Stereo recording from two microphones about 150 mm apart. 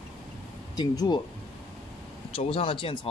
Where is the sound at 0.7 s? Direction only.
25° left (ahead or behind).